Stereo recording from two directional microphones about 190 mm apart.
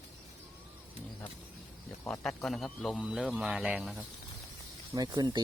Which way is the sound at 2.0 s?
5° left (ahead or behind).